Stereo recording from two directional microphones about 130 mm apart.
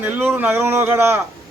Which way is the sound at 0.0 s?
15° right (ahead or behind).